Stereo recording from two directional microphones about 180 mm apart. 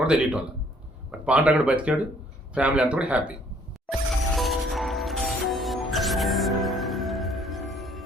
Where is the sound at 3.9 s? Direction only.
Centre (ahead or behind).